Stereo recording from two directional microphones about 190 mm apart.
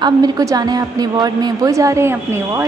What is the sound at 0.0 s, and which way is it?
A woman's voice, 20° right (ahead or behind).